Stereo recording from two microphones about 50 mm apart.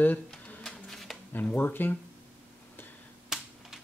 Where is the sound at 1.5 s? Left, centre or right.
Left.